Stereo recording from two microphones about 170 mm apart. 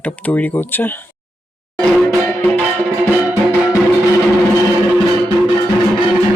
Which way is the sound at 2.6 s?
5° right (ahead or behind).